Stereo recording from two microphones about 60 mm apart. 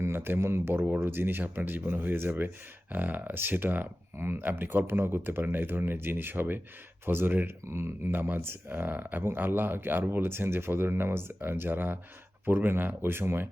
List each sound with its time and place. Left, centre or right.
0.0 s speech: right
8.1 s speech: right